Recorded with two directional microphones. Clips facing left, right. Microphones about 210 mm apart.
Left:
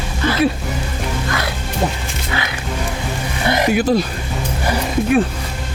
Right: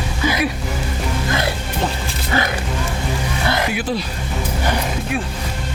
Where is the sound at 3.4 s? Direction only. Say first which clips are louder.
Left 5 dB; 20° left (ahead or behind).